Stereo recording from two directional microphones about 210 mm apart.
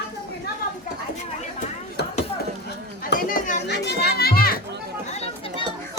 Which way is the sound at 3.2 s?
40° left (ahead or behind).